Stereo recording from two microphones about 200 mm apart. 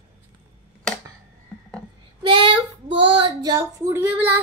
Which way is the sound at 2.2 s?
25° right (ahead or behind).